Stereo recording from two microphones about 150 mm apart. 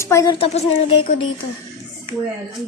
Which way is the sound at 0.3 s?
40° left (ahead or behind).